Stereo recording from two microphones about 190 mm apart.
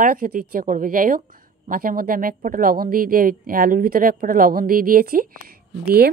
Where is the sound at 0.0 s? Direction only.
50° right (ahead or behind).